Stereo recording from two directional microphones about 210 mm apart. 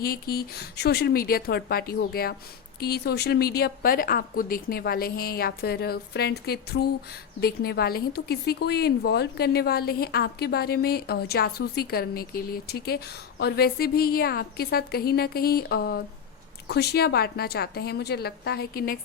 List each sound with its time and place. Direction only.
0.0 s a woman's voice: 45° left (ahead or behind)